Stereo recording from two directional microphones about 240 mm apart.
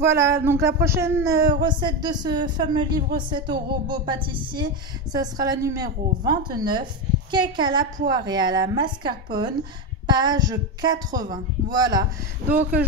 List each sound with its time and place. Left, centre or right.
0.2 s speech: centre
12.4 s speech: centre